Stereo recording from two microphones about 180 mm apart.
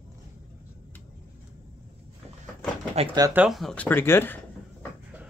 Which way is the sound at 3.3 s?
5° right (ahead or behind).